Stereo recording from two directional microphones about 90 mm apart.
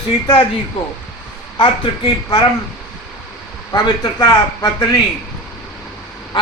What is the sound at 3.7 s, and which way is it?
A man's voice, 45° left (ahead or behind).